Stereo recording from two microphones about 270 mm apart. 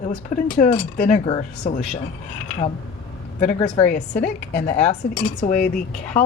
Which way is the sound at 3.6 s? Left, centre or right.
Left.